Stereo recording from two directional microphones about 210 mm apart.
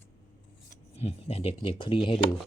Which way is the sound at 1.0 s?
30° left (ahead or behind).